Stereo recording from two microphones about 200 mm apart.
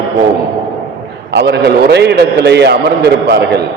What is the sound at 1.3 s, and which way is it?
A man's voice, 60° right (ahead or behind).